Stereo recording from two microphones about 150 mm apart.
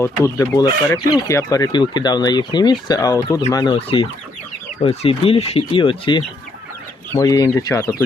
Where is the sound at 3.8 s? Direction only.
40° left (ahead or behind).